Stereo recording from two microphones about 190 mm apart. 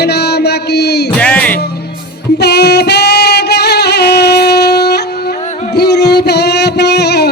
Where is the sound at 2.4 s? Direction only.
60° left (ahead or behind).